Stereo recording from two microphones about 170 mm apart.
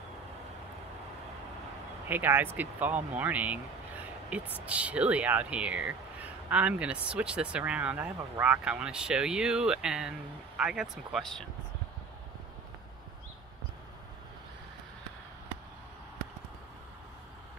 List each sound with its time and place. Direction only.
2.0 s speech: 10° right (ahead or behind)